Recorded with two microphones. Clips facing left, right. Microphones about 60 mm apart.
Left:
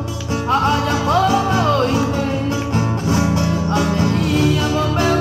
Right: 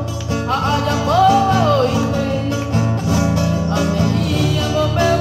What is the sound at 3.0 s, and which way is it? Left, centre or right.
Music, left.